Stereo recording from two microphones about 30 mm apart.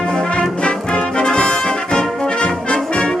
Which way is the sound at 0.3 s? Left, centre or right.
Left.